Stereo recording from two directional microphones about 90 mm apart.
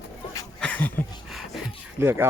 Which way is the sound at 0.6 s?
15° left (ahead or behind).